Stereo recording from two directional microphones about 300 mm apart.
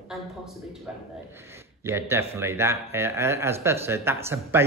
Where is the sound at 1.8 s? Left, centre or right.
Centre.